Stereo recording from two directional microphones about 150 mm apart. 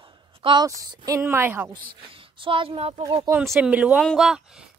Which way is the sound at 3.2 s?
20° right (ahead or behind).